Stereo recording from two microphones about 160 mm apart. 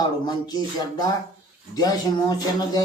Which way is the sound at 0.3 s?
25° left (ahead or behind).